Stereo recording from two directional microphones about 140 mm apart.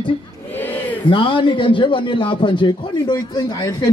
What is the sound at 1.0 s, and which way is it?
A man's voice, 35° left (ahead or behind).